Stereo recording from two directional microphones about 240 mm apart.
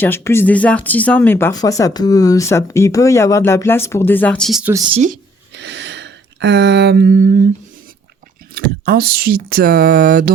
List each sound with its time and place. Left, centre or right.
0.0 s speech: centre
5.5 s a sound: right
8.5 s speech: right